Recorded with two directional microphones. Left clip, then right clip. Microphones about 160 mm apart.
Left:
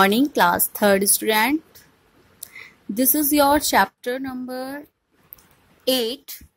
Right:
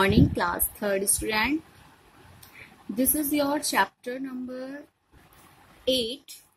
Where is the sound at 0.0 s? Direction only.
55° left (ahead or behind).